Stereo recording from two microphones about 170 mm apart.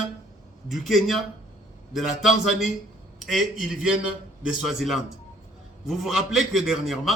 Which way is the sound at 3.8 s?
5° right (ahead or behind).